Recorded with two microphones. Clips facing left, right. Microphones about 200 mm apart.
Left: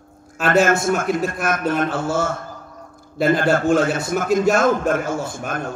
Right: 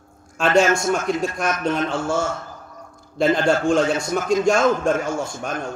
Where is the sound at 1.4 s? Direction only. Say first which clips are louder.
Left 1 dB; 5° left (ahead or behind).